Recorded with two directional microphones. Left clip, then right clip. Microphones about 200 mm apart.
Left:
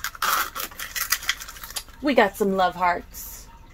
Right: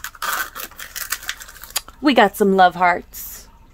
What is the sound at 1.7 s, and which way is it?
Speech, 55° right (ahead or behind).